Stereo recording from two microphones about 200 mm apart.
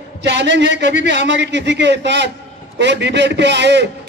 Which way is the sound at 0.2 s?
60° right (ahead or behind).